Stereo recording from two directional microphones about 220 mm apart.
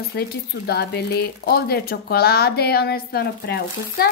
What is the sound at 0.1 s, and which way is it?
Speech, 45° left (ahead or behind).